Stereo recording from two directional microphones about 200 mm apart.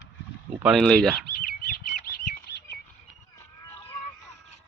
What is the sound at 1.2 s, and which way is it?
Bird, 50° left (ahead or behind).